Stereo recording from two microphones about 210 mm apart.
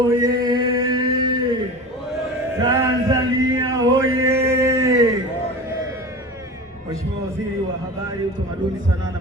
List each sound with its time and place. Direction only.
0.1 s mantra: 15° right (ahead or behind)
2.6 s male singing: 15° right (ahead or behind)